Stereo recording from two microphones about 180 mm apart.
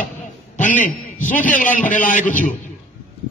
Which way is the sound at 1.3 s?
10° left (ahead or behind).